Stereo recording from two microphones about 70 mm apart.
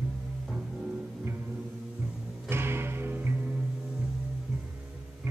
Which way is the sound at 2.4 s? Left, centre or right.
Right.